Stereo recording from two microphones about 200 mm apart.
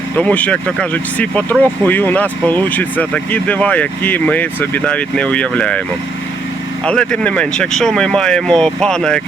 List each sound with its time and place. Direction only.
0.2 s speech: 5° left (ahead or behind)
6.8 s speech: 5° left (ahead or behind)